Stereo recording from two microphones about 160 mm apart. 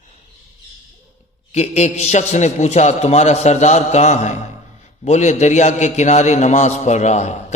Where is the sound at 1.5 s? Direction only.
45° left (ahead or behind).